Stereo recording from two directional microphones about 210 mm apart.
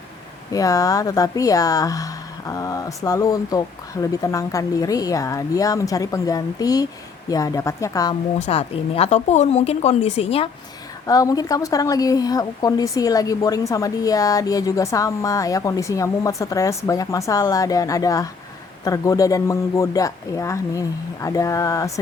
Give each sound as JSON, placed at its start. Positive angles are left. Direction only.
{"t": 0.5, "sound": "a woman's voice", "side_deg": 15}
{"t": 8.4, "sound": "a woman's voice", "side_deg": 30}
{"t": 11.0, "sound": "a woman's voice", "side_deg": 15}